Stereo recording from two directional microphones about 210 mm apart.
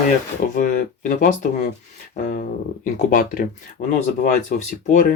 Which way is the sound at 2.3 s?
40° left (ahead or behind).